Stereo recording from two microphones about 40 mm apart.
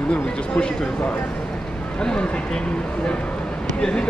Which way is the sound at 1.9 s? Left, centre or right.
Left.